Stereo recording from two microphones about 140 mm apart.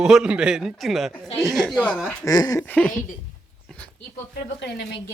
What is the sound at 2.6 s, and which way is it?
Speech, 10° left (ahead or behind).